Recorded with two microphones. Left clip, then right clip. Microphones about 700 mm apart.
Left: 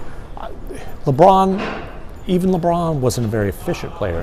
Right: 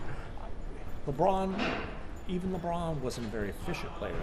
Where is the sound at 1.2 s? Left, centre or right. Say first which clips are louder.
Left 17 dB; left.